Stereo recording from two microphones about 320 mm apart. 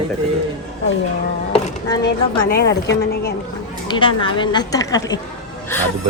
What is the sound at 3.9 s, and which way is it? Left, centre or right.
A woman's voice, centre.